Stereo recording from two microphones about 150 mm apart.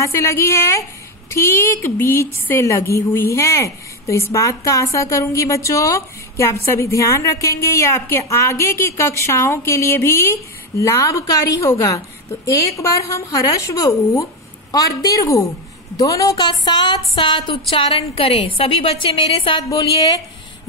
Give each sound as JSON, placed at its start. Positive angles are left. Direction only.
{"t": 0.0, "sound": "a woman's voice", "side_deg": 15}